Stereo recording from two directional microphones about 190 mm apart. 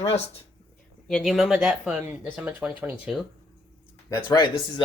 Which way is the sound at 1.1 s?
Centre (ahead or behind).